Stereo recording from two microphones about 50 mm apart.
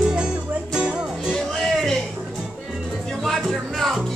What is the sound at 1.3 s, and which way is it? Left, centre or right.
Music, centre.